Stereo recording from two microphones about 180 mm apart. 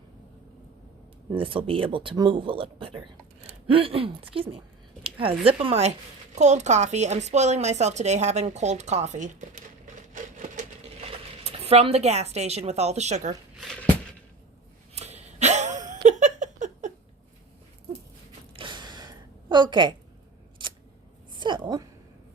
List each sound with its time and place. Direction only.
1.4 s a woman's voice: 30° right (ahead or behind); by 10.9 s 45° right (ahead or behind)
11.4 s a woman's voice: 35° right (ahead or behind)
14.9 s a sound: 35° right (ahead or behind)
18.5 s a sound: 25° right (ahead or behind)
20.6 s scissors: 25° right (ahead or behind)
21.3 s a woman's voice: 25° right (ahead or behind)